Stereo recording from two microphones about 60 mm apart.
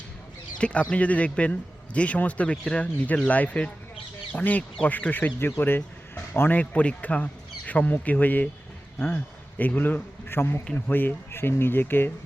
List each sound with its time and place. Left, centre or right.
0.6 s a man's voice: centre; by 6.6 s left
6.6 s a man's voice: left